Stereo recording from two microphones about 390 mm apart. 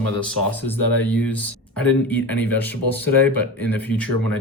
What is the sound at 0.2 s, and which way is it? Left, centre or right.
Speech, centre.